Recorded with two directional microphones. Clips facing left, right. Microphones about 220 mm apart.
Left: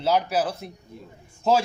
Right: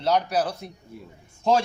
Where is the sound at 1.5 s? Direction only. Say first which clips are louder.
Even; 5° left (ahead or behind).